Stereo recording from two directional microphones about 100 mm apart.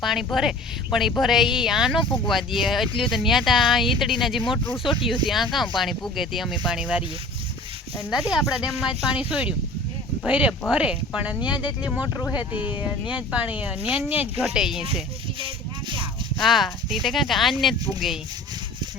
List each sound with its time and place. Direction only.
0.0 s speech: centre (ahead or behind)
8.3 s speech: 5° right (ahead or behind)
11.4 s speech: 50° left (ahead or behind)
12.4 s speech: 15° right (ahead or behind)
15.4 s a sound: 60° right (ahead or behind)
16.4 s speech: centre (ahead or behind)